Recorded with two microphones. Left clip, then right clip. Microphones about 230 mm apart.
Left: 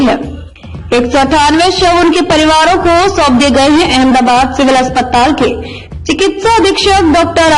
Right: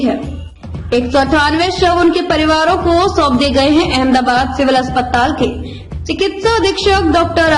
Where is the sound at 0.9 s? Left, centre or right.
Left.